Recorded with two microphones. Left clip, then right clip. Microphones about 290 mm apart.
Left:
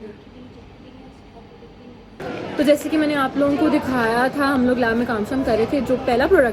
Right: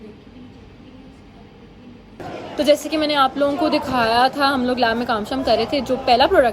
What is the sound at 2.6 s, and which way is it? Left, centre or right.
A woman's voice, centre.